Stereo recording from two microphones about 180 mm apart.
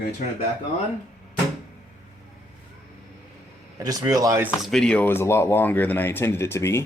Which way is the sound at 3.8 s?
20° right (ahead or behind).